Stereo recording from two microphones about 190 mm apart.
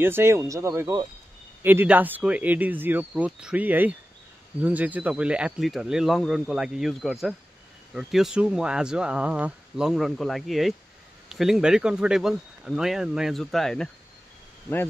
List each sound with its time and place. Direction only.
0.0 s speech: 10° right (ahead or behind)